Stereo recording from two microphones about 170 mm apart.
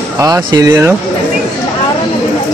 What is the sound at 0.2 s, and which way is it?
Speech, 20° right (ahead or behind).